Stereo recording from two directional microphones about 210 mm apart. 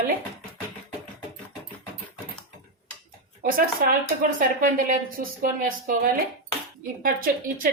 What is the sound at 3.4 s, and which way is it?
A woman's voice, 45° right (ahead or behind).